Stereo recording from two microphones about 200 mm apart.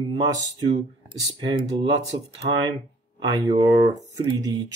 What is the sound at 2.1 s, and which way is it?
Speech, 30° right (ahead or behind).